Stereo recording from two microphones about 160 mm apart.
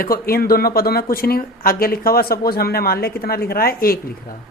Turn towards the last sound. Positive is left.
turn(degrees=70)  # may be behind; listen again after turning